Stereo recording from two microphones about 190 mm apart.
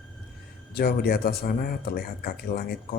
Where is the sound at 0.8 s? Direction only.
55° left (ahead or behind).